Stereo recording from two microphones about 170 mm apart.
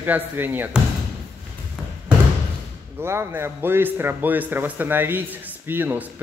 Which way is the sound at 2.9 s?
15° right (ahead or behind).